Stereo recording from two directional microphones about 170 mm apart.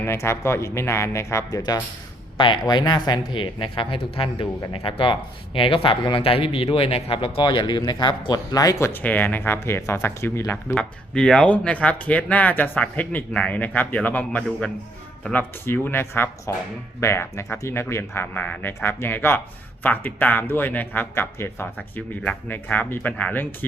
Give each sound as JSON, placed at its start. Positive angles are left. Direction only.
{"t": 0.0, "sound": "speech", "side_deg": 15}